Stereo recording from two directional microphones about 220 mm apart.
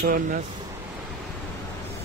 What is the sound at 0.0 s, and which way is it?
Speech, 40° right (ahead or behind).